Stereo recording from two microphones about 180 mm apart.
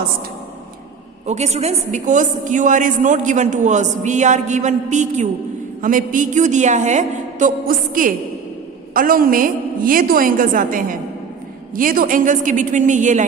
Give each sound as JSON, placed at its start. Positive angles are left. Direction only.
{"t": 1.3, "sound": "a woman's voice", "side_deg": -40}